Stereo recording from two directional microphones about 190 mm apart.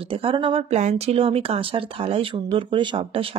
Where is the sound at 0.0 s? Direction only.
30° right (ahead or behind).